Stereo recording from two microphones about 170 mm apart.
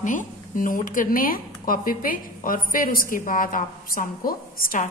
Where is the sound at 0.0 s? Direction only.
50° left (ahead or behind).